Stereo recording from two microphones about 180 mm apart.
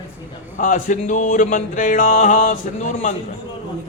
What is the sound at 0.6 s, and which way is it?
Music, 45° left (ahead or behind).